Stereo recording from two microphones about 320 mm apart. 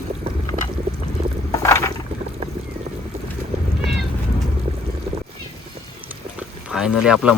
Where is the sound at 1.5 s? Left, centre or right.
Centre.